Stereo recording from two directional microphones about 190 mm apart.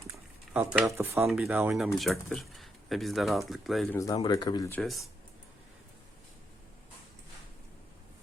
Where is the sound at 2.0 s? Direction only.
Centre (ahead or behind).